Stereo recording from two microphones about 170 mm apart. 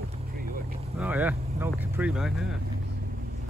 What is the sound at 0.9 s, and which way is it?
Speech, 10° right (ahead or behind).